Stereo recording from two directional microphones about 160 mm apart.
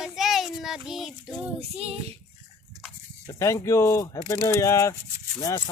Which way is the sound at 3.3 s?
20° left (ahead or behind).